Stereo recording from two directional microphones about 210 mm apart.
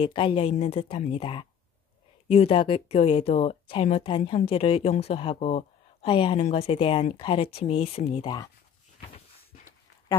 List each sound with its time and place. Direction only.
0.0 s speech: 25° left (ahead or behind)